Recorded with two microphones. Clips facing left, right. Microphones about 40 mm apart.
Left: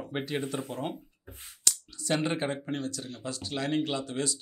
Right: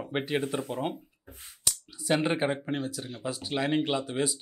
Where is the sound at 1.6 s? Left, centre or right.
Centre.